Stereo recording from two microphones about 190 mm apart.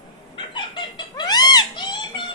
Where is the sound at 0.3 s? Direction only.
25° left (ahead or behind).